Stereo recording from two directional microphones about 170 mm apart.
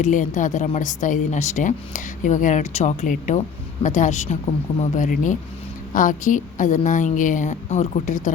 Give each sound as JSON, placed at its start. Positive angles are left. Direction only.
{"t": 0.0, "sound": "speech", "side_deg": 50}